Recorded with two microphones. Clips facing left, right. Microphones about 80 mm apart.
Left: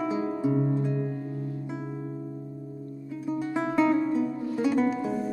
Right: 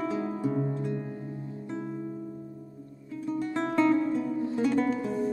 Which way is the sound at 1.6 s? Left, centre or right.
Centre.